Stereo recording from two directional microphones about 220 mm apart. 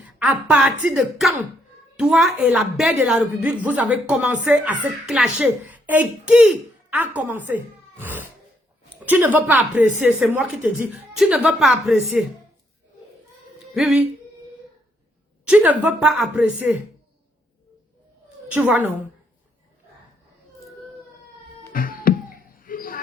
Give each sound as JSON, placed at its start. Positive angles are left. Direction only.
{"t": 0.0, "sound": "a woman's voice", "side_deg": -5}
{"t": 13.7, "sound": "speech", "side_deg": 0}
{"t": 15.4, "sound": "a woman's voice", "side_deg": -5}
{"t": 18.5, "sound": "a woman's voice", "side_deg": -10}
{"t": 21.7, "sound": "music", "side_deg": 40}